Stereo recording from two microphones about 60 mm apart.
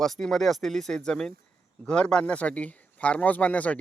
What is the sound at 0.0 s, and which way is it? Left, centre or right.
Speech, centre.